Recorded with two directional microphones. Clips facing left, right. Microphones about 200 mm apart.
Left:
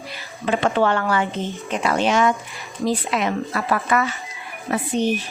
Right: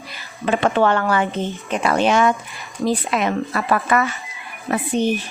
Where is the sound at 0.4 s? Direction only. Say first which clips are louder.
Right 2 dB; 55° right (ahead or behind).